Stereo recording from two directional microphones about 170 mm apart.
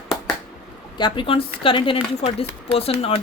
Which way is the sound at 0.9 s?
30° left (ahead or behind).